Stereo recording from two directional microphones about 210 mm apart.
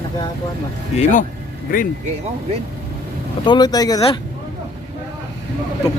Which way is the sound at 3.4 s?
20° left (ahead or behind).